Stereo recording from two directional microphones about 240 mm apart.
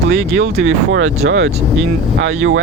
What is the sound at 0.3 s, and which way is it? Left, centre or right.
Speech, right.